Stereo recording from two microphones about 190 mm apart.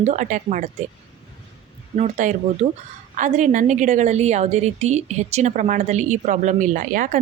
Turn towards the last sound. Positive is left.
turn(degrees=-45)  # may be behind; listen again after turning